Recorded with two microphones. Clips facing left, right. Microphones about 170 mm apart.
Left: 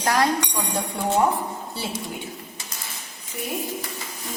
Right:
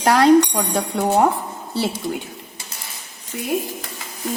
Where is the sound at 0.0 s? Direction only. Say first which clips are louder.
Right 9 dB; 75° right (ahead or behind).